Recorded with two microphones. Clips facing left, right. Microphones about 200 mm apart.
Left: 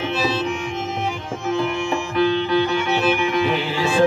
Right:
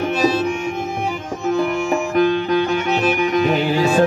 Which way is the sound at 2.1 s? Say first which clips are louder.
Right 1 dB; 45° right (ahead or behind).